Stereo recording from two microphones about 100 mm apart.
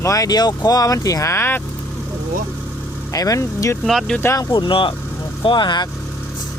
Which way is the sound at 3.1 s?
35° left (ahead or behind).